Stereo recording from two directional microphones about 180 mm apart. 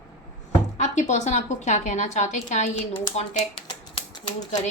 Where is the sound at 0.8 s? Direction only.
40° left (ahead or behind).